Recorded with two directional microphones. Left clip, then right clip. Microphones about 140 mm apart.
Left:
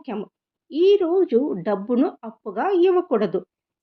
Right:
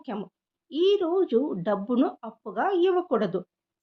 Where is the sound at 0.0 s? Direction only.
20° left (ahead or behind).